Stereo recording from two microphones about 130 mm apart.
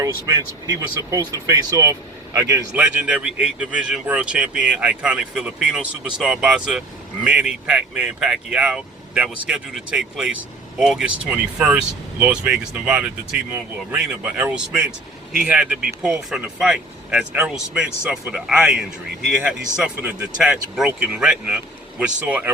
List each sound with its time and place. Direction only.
0.0 s speech: 30° right (ahead or behind)
2.7 s speech: 5° right (ahead or behind)